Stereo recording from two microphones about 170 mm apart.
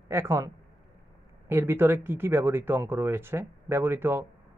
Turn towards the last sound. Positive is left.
turn(degrees=-15)  # may be behind; listen again after turning